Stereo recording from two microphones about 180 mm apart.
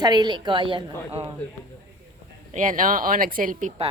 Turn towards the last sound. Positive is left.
turn(degrees=-45)  # may be behind; listen again after turning